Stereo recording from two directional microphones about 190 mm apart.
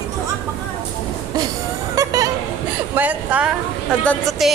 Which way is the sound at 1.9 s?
20° right (ahead or behind).